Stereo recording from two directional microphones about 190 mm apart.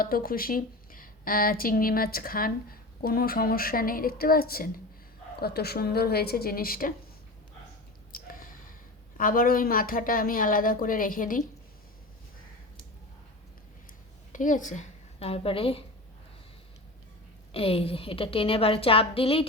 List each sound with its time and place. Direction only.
0.0 s a woman's voice: 50° left (ahead or behind)
8.1 s snort: 45° left (ahead or behind)
9.1 s a woman's voice: 45° left (ahead or behind)
14.3 s a woman's voice: 40° left (ahead or behind)
17.5 s a woman's voice: 30° left (ahead or behind)